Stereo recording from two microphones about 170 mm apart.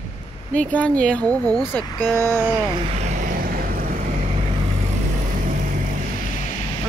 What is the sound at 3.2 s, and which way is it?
Vehicle, 55° right (ahead or behind).